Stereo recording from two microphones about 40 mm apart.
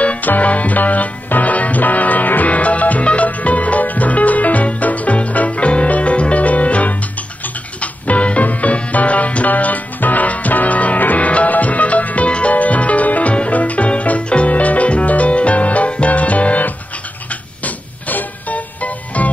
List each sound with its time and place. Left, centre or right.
0.0 s music: left